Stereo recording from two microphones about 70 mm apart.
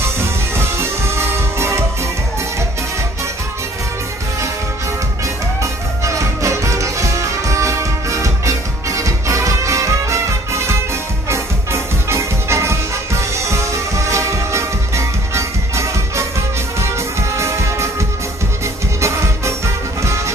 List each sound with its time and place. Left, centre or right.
0.0 s music: right
5.6 s music: right
18.9 s music: right